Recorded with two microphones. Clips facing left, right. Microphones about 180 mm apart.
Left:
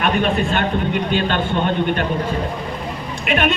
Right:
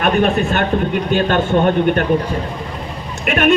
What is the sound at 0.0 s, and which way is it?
A man's voice, 45° right (ahead or behind).